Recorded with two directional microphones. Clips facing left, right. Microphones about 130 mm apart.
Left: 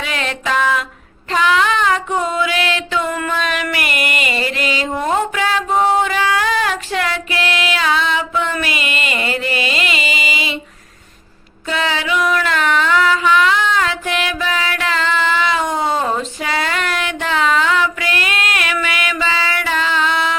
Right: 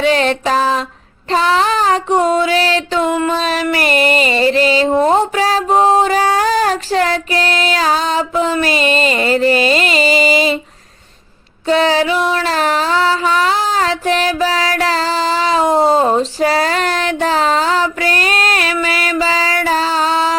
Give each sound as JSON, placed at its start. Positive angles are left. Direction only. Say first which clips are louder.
{"t": 0.0, "sound": "music", "louder": "right 9 dB", "side_deg": -35}
{"t": 11.7, "sound": "music", "louder": "right 7 dB", "side_deg": -35}